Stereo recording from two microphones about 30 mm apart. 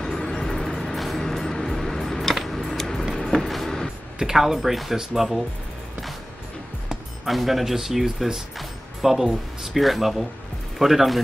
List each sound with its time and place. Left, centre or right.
0.0 s vehicle: centre
1.2 s a sound: centre
3.2 s vehicle: centre
4.2 s speech: centre
4.6 s speech: centre
7.2 s speech: centre
8.5 s music: centre
9.6 s speech: centre